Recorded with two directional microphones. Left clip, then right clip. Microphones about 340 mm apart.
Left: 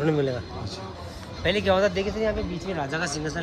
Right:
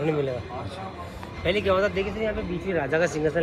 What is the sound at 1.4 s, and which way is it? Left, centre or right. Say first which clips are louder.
Speech: left 1 dB; left.